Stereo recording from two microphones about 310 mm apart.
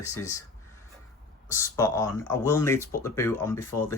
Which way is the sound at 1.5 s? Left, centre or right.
Centre.